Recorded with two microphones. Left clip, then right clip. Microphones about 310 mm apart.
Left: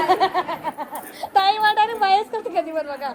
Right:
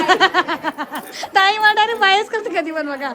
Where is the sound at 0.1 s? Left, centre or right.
Right.